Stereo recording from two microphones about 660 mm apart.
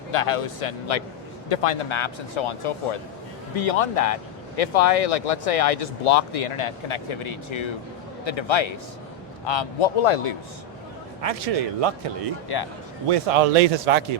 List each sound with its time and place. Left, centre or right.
0.1 s speech: left
11.2 s speech: right